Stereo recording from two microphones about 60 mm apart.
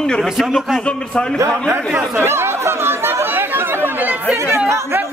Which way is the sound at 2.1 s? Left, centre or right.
Right.